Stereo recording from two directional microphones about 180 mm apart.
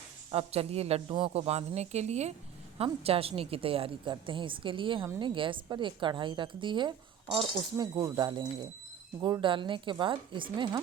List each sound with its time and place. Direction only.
0.3 s a woman's voice: 35° right (ahead or behind)